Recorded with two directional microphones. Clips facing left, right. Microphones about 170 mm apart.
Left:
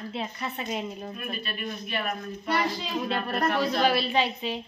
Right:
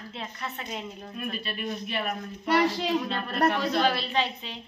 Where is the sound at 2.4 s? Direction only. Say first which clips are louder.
Right 4 dB; 75° right (ahead or behind).